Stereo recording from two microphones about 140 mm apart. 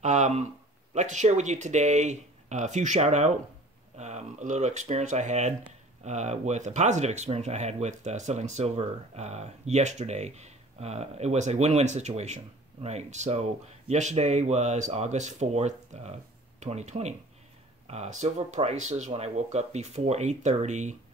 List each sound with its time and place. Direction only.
0.0 s speech: 55° right (ahead or behind)